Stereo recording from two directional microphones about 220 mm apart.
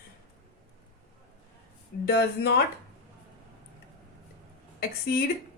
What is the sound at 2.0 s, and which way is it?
Speech, 45° left (ahead or behind).